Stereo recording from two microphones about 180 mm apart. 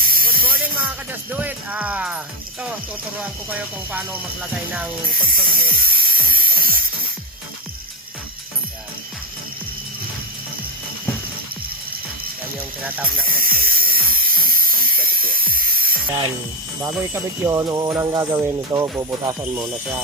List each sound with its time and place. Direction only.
0.0 s hiss: 55° right (ahead or behind)
1.3 s music: 10° right (ahead or behind)
3.2 s music: 10° right (ahead or behind)
5.2 s speech: 55° right (ahead or behind)
12.8 s music: 10° right (ahead or behind)
13.3 s a sound: 55° right (ahead or behind)
17.5 s speech: 20° right (ahead or behind)